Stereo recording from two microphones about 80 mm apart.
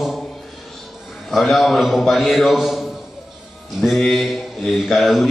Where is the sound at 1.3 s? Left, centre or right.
Centre.